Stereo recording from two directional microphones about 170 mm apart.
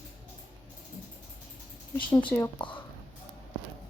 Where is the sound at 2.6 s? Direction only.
30° left (ahead or behind).